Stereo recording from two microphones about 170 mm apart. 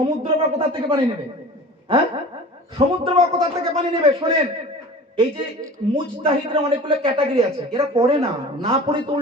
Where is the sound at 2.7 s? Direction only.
35° right (ahead or behind).